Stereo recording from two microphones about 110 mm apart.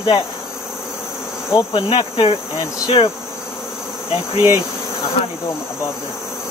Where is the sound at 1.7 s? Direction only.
50° left (ahead or behind).